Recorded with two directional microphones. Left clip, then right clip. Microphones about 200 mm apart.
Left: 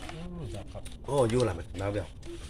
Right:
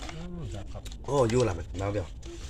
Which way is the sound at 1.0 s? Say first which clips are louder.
Right 1 dB; 30° right (ahead or behind).